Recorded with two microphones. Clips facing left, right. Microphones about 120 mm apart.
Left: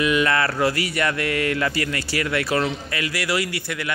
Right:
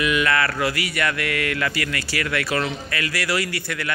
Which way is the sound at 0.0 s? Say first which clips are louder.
Left 1 dB; 25° left (ahead or behind).